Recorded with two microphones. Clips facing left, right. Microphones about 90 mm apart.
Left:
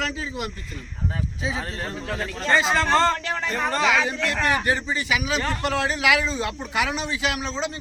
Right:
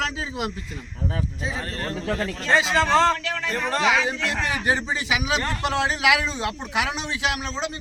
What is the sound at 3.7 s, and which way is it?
A man's voice, 20° right (ahead or behind).